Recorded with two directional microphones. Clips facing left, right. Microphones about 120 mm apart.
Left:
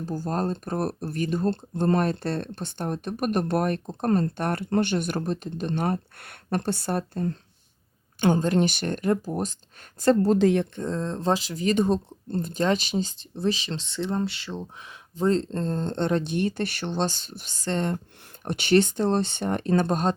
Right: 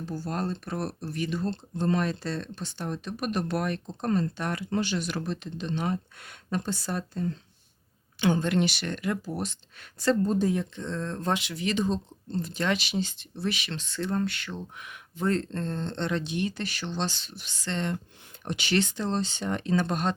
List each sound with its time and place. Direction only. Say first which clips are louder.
0.0 s speech: left 4 dB; 45° left (ahead or behind)
8.2 s speech: left 3 dB; 40° left (ahead or behind)
10.2 s speech: left 6 dB; 85° left
10.8 s speech: left 4 dB; 40° left (ahead or behind)